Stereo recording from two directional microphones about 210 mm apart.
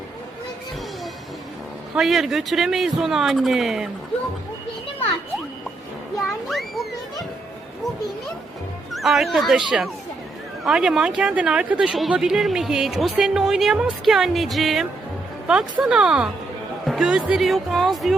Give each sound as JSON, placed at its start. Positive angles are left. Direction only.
{"t": 2.0, "sound": "speech", "side_deg": 0}
{"t": 6.1, "sound": "children playing", "side_deg": 0}
{"t": 8.9, "sound": "speech", "side_deg": 0}